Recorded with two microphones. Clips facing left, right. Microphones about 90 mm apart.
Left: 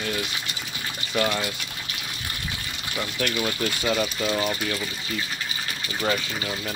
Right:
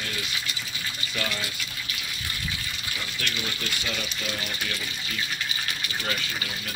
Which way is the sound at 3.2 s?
45° left (ahead or behind).